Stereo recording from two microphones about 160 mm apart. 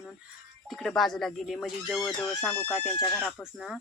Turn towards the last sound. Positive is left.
turn(degrees=0)  # may be behind; listen again after turning